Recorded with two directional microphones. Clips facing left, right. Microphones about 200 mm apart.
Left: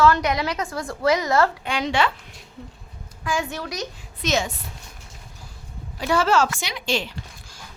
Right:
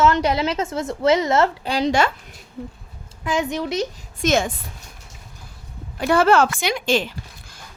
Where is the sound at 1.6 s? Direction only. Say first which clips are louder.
Right 3 dB; 35° right (ahead or behind).